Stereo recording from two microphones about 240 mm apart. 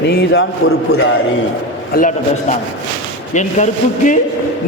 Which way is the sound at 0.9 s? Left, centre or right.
Left.